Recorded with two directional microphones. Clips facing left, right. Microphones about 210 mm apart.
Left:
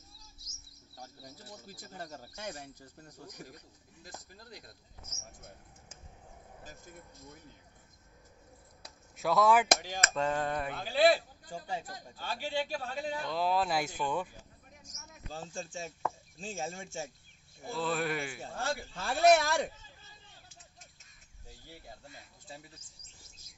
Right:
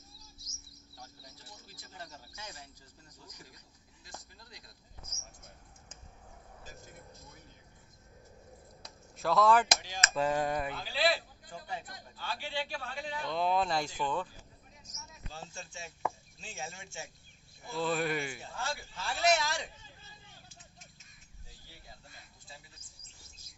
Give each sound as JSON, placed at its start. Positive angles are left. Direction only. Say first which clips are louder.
{"t": 0.9, "sound": "speech", "louder": "left 5 dB", "side_deg": 45}
{"t": 8.8, "sound": "a sound", "louder": "left 1 dB", "side_deg": 0}
{"t": 9.7, "sound": "speech", "louder": "left 4 dB", "side_deg": 55}
{"t": 10.1, "sound": "a sound", "louder": "right 2 dB", "side_deg": -10}
{"t": 10.8, "sound": "speech", "louder": "left 8 dB", "side_deg": 50}
{"t": 11.5, "sound": "a man's voice", "louder": "left 3 dB", "side_deg": 30}
{"t": 13.3, "sound": "speech", "louder": "right 1 dB", "side_deg": 0}
{"t": 14.8, "sound": "vehicle", "louder": "even", "side_deg": 50}
{"t": 16.3, "sound": "speech", "louder": "left 6 dB", "side_deg": 45}
{"t": 17.7, "sound": "speech", "louder": "right 1 dB", "side_deg": 0}
{"t": 18.4, "sound": "speech", "louder": "left 4 dB", "side_deg": 45}